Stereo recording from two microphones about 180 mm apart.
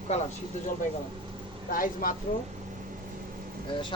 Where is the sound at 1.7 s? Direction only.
50° left (ahead or behind).